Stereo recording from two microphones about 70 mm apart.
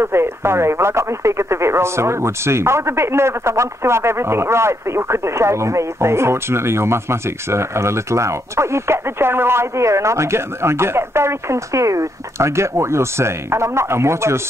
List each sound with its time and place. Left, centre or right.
0.0 s speech: right